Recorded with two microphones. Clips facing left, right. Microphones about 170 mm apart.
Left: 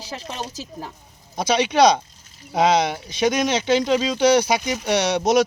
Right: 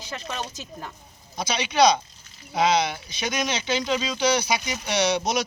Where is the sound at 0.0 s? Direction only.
30° left (ahead or behind).